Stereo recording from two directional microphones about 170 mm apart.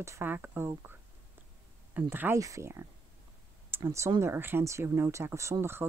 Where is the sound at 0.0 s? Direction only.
15° right (ahead or behind).